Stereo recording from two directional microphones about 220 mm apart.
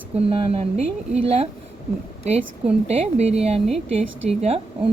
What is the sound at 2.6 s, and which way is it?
Speech, 30° right (ahead or behind).